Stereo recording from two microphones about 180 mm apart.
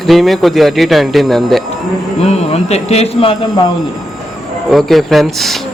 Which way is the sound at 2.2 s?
35° left (ahead or behind).